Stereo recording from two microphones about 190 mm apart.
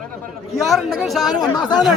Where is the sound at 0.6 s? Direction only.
Centre (ahead or behind).